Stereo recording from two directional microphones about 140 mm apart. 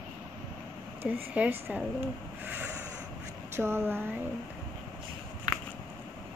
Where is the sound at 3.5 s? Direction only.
20° right (ahead or behind).